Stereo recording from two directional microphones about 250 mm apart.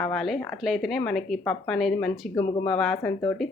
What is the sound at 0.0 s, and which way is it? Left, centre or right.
A woman's voice, centre.